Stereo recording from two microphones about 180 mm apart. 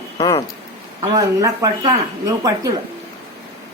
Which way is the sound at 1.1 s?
20° right (ahead or behind).